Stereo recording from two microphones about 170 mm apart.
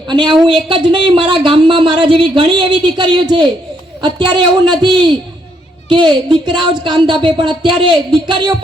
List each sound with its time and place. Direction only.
0.1 s speech: 25° right (ahead or behind)